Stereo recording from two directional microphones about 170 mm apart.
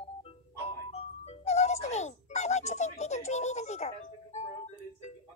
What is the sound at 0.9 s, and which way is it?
Music, 35° left (ahead or behind).